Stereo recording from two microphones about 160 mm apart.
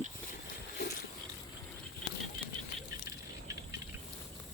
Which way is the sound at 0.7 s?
70° left (ahead or behind).